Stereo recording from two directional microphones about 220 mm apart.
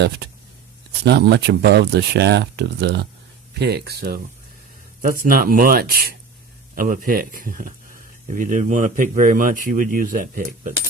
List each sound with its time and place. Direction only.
1.0 s speech: 50° right (ahead or behind)